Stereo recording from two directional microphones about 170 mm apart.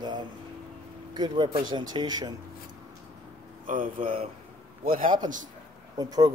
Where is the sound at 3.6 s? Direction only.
55° right (ahead or behind).